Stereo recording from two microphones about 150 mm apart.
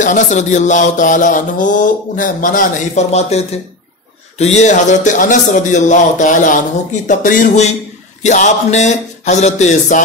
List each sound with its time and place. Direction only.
0.0 s music: 55° left (ahead or behind)
8.2 s speech: 50° left (ahead or behind)